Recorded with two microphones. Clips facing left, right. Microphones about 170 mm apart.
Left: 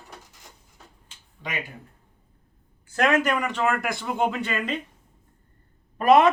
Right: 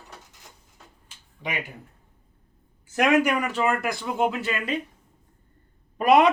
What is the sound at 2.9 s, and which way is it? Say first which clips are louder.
Speech: right 1 dB; 15° right (ahead or behind).